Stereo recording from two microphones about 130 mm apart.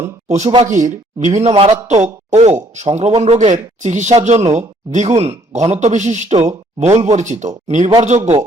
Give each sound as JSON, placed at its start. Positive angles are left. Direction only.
{"t": 0.3, "sound": "a man's voice", "side_deg": -60}
{"t": 0.8, "sound": "speech", "side_deg": -70}
{"t": 1.4, "sound": "a man's voice", "side_deg": -55}